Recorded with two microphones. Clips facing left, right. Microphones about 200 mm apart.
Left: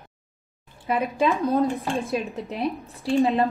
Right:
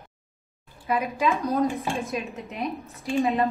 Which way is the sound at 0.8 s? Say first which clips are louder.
Left 2 dB; 30° left (ahead or behind).